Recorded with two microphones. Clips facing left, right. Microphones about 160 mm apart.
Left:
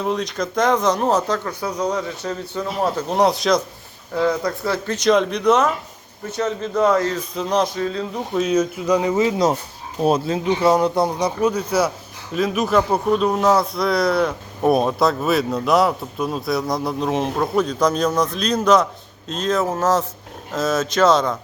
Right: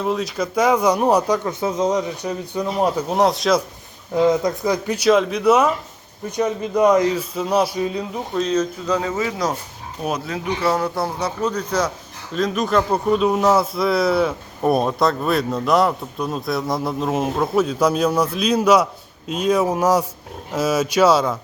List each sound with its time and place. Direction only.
0.0 s speech: 5° right (ahead or behind)
3.1 s speech: centre (ahead or behind)
4.1 s speech: 20° right (ahead or behind)
8.4 s speech: 10° left (ahead or behind); by 21.3 s 10° right (ahead or behind)